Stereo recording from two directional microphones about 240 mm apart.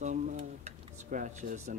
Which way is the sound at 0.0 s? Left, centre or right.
Right.